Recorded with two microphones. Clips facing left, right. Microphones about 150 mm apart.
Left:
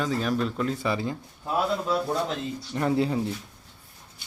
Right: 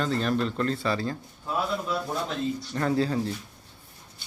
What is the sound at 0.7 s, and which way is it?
Speech, 15° left (ahead or behind).